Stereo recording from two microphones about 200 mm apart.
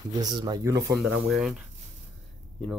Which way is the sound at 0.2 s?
20° right (ahead or behind).